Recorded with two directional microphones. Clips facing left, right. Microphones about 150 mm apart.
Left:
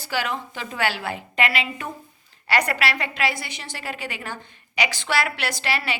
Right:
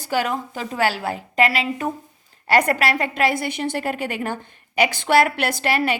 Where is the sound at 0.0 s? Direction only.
45° right (ahead or behind).